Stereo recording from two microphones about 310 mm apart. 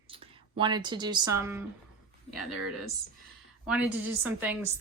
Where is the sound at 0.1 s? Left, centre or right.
Centre.